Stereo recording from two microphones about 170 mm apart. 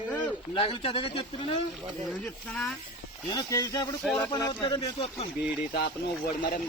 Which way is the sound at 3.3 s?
25° left (ahead or behind).